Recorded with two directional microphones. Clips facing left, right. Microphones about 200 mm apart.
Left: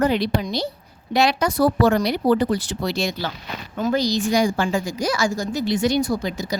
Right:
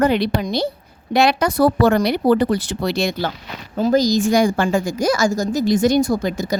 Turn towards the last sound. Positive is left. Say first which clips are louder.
# right 4 dB
turn(degrees=-50)  # may be behind; listen again after turning